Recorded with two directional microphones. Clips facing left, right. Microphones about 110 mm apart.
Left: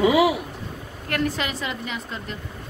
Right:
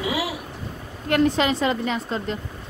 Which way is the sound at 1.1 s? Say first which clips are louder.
Right 6 dB; 25° right (ahead or behind).